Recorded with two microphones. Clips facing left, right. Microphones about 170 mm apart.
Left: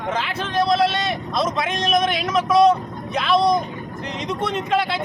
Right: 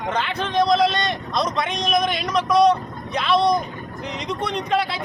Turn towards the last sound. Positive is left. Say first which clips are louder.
# left 1 dB
turn(degrees=0)  # may be behind; listen again after turning